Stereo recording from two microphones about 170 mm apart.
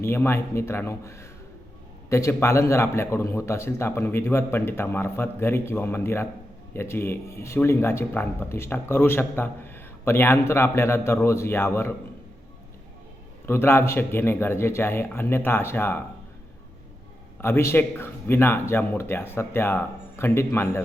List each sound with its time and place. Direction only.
0.0 s speech: 15° left (ahead or behind)
13.4 s speech: 15° left (ahead or behind)
17.4 s speech: 15° left (ahead or behind)